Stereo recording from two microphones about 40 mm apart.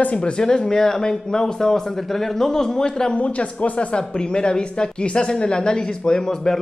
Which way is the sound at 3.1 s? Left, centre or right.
Left.